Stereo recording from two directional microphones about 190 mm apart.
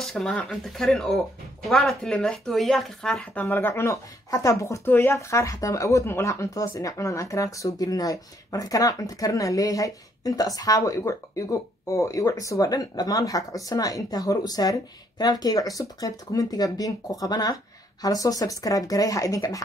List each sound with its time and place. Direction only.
0.0 s speech: centre (ahead or behind); by 19.6 s 15° left (ahead or behind)